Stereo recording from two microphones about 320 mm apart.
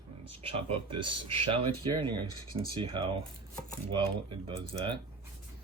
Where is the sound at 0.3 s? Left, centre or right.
Centre.